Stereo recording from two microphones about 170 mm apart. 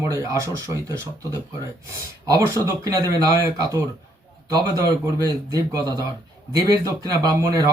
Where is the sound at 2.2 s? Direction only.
20° right (ahead or behind).